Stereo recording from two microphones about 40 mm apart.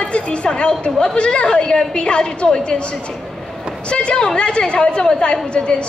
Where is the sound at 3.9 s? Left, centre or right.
Left.